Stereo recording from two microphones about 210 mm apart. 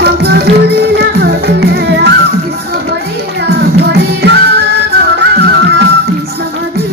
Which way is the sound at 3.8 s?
55° right (ahead or behind).